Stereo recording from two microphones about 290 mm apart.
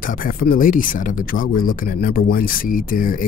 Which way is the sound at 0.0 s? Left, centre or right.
Left.